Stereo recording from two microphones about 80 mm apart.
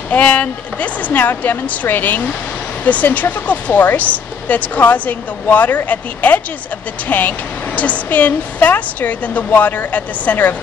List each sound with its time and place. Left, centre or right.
0.1 s speech: centre